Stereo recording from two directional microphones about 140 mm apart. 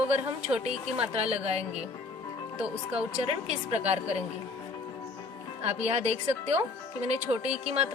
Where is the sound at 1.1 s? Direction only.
45° right (ahead or behind).